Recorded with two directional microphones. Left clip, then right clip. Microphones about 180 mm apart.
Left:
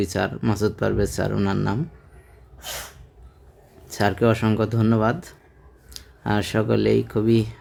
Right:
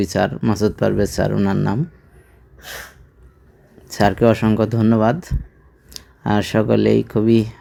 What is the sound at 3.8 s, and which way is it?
Speech, 20° right (ahead or behind).